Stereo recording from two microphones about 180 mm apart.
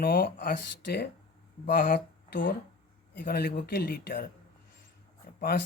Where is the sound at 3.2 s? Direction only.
60° left (ahead or behind).